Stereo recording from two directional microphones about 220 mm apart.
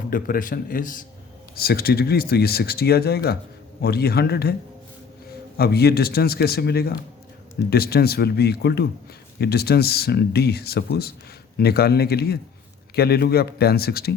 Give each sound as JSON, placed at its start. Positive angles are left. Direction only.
{"t": 0.1, "sound": "a man's voice", "side_deg": 40}
{"t": 5.5, "sound": "speech", "side_deg": 45}